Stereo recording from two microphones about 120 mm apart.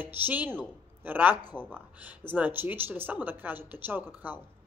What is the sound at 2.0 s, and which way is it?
Speech, 15° right (ahead or behind).